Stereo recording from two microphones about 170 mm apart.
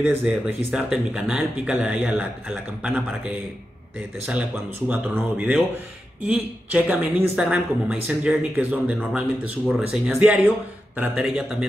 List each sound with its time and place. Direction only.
0.2 s a man's voice: 5° right (ahead or behind)